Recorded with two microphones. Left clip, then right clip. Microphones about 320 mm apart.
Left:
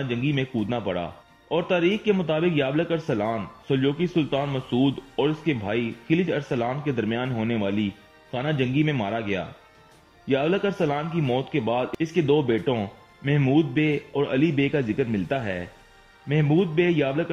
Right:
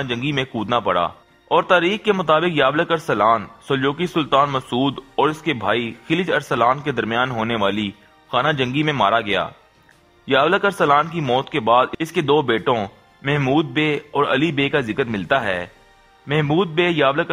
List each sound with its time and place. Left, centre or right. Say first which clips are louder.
0.3 s speech: right 9 dB; right